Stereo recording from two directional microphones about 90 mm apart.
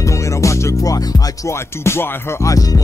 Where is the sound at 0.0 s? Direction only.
35° left (ahead or behind).